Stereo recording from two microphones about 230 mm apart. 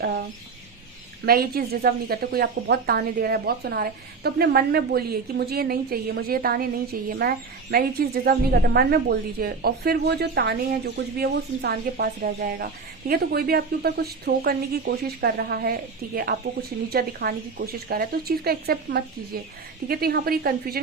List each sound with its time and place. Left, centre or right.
0.0 s a woman's voice: right